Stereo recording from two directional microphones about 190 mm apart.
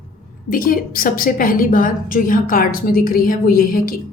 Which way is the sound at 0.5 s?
50° left (ahead or behind).